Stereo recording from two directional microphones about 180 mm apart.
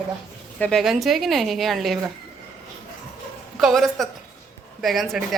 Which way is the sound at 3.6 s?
Centre (ahead or behind).